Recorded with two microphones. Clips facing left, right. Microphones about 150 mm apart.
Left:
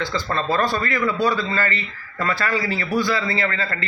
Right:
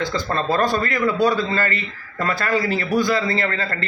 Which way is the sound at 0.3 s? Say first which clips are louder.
Right 2 dB; 45° right (ahead or behind).